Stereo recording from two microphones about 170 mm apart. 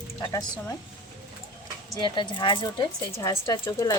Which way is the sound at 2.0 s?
30° left (ahead or behind).